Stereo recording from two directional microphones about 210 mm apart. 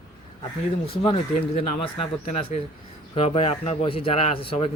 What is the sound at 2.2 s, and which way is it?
Speech, 30° left (ahead or behind).